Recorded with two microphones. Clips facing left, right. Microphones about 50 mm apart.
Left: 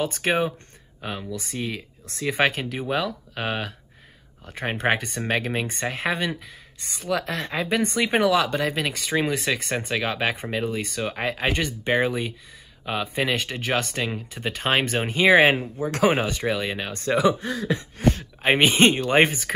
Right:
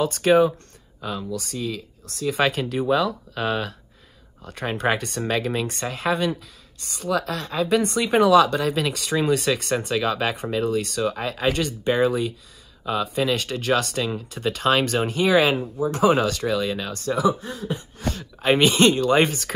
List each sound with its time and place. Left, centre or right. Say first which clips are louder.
0.0 s speech: right 6 dB; centre; by 2.4 s left
2.5 s speech: right 5 dB; centre
4.6 s speech: even; left
8.2 s speech: right 6 dB; centre; by 13.4 s left
13.4 s speech: right 3 dB; centre; by 15.7 s left
15.8 s speech: right 2 dB; left
16.3 s speech: right 2 dB; left
17.1 s speech: left 1 dB; left
18.4 s speech: right 1 dB; left